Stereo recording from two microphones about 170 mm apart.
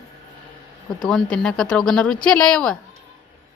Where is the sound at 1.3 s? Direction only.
5° left (ahead or behind).